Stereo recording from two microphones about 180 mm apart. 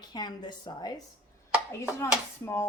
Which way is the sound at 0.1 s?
25° left (ahead or behind).